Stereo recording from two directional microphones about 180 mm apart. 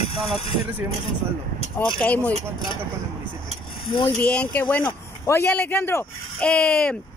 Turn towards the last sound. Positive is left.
turn(degrees=5)  # may be behind; listen again after turning